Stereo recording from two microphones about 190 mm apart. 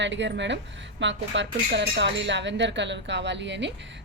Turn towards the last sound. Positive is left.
turn(degrees=-70)  # may be behind; listen again after turning